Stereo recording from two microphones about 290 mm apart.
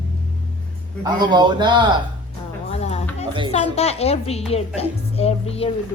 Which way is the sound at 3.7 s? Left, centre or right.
Left.